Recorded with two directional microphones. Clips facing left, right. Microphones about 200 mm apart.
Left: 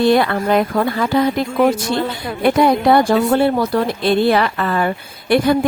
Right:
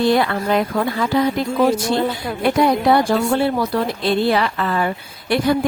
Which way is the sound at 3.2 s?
45° left (ahead or behind).